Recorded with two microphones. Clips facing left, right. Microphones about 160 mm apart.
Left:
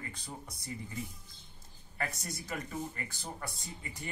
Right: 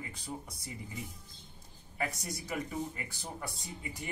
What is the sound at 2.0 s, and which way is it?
Speech, 10° right (ahead or behind).